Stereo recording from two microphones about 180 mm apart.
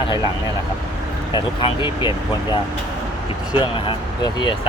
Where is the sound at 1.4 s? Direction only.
25° left (ahead or behind).